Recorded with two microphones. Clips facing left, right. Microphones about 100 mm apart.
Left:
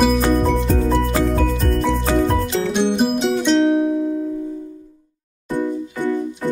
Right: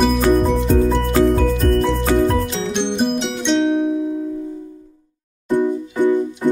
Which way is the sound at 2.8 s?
5° left (ahead or behind).